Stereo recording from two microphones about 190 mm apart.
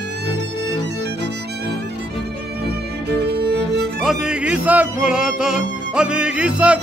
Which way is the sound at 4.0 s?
5° right (ahead or behind).